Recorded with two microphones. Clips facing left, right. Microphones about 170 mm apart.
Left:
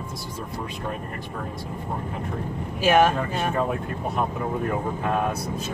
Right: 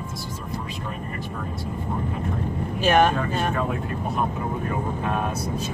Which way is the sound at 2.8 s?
5° left (ahead or behind).